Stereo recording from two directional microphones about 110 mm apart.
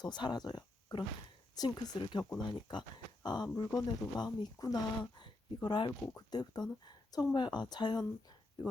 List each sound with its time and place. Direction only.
0.0 s speech: 40° left (ahead or behind)
6.0 s speech: 35° left (ahead or behind)